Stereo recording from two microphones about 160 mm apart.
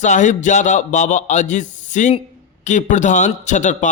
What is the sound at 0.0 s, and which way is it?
Speech, 50° left (ahead or behind).